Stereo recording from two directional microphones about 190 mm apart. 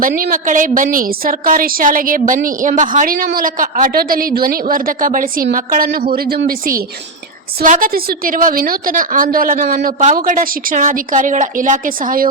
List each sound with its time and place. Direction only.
0.2 s a woman's voice: 45° right (ahead or behind)